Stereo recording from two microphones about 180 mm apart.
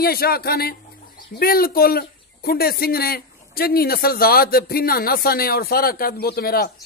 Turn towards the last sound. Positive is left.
turn(degrees=55)  # may be behind; listen again after turning